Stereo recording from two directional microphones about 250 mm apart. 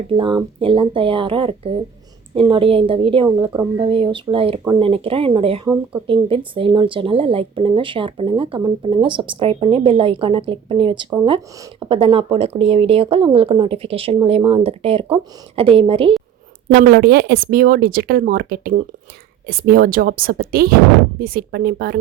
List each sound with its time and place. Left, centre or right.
0.1 s speech: centre
16.7 s speech: right